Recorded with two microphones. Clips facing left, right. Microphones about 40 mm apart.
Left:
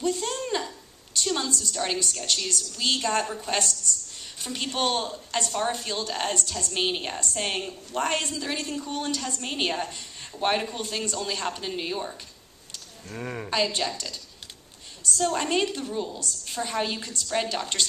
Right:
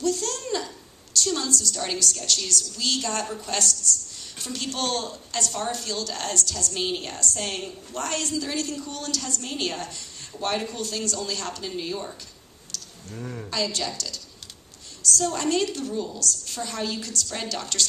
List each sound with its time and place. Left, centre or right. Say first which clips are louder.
0.0 s a sound: right 1 dB; left
1.1 s a woman's voice: right 1 dB; left
12.7 s a woman's voice: even; left